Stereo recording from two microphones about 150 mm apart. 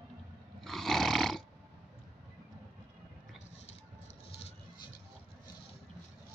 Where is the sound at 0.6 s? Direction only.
Centre (ahead or behind).